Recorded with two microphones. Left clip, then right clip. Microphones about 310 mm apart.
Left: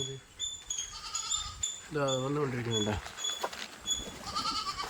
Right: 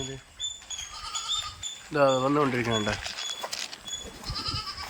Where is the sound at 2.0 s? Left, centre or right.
Right.